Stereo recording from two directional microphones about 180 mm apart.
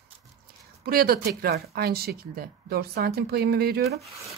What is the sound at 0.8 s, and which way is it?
Speech, 55° right (ahead or behind).